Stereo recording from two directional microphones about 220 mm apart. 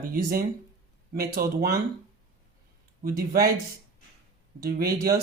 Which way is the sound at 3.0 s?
40° right (ahead or behind).